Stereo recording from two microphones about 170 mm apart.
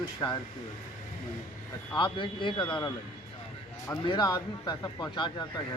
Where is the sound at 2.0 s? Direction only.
30° left (ahead or behind).